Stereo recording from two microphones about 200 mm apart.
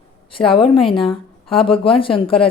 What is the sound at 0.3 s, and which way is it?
A woman's voice, 25° left (ahead or behind).